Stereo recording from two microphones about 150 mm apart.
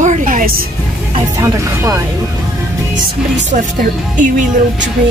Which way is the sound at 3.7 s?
60° right (ahead or behind).